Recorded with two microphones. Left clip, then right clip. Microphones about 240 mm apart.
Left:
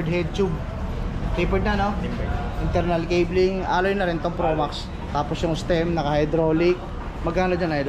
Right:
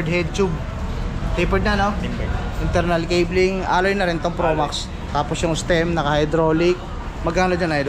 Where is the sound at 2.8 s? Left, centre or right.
Centre.